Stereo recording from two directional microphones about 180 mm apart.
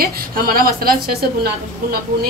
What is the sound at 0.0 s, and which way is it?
Speech, 55° right (ahead or behind).